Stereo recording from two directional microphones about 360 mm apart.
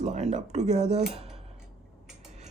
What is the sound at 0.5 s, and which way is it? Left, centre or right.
Cutlery, centre.